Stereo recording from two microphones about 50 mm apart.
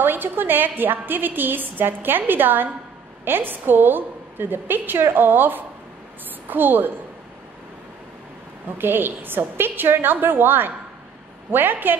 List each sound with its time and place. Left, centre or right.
0.0 s a woman's voice: right
8.7 s a woman's voice: right